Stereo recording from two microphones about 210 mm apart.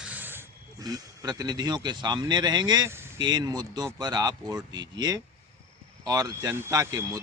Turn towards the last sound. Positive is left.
turn(degrees=-15)  # may be behind; listen again after turning